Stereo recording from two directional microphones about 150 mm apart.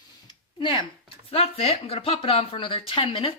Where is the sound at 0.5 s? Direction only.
35° left (ahead or behind).